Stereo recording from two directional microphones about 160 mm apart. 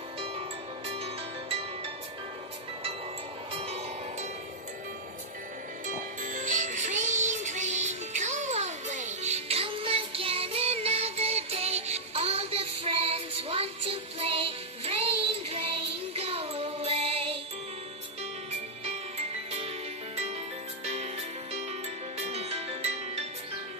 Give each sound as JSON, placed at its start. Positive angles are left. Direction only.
{"t": 0.8, "sound": "music", "side_deg": -35}
{"t": 3.5, "sound": "music", "side_deg": -40}
{"t": 5.9, "sound": "music", "side_deg": -50}
{"t": 18.9, "sound": "music", "side_deg": -40}
{"t": 20.8, "sound": "music", "side_deg": -40}
{"t": 22.2, "sound": "music", "side_deg": -40}